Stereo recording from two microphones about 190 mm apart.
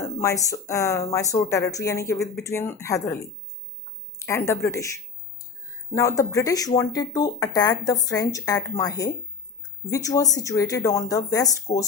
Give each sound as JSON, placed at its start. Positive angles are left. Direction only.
{"t": 0.0, "sound": "speech", "side_deg": 15}
{"t": 4.3, "sound": "speech", "side_deg": 15}